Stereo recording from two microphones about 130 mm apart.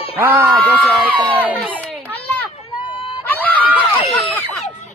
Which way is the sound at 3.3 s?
10° left (ahead or behind).